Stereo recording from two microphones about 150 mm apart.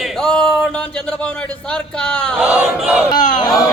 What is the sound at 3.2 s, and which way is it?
Speech, 60° left (ahead or behind).